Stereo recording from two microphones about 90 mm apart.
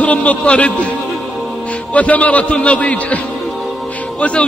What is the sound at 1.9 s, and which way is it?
A man's voice, 15° left (ahead or behind).